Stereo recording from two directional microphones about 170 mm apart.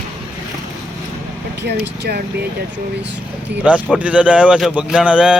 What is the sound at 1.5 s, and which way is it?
Speech, 75° right (ahead or behind).